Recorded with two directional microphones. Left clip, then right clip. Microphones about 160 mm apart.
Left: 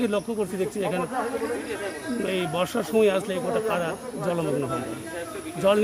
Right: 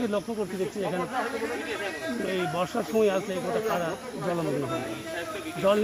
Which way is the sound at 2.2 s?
20° left (ahead or behind).